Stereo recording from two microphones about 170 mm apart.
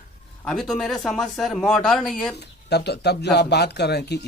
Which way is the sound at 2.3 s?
75° left (ahead or behind).